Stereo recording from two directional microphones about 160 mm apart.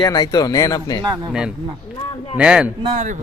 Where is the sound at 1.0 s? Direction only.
25° right (ahead or behind).